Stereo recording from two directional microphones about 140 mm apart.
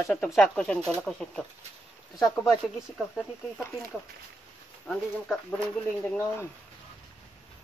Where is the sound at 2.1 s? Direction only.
25° left (ahead or behind).